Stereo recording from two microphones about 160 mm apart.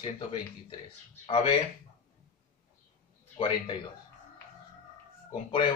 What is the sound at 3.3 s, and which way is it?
Speech, 35° left (ahead or behind).